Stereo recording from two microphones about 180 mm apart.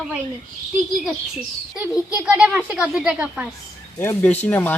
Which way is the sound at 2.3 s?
10° right (ahead or behind).